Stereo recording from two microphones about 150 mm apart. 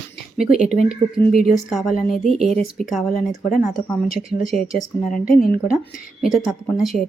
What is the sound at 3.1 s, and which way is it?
Speech, 65° left (ahead or behind).